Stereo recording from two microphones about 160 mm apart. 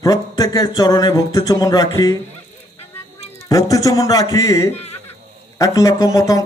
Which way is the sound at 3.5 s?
20° left (ahead or behind).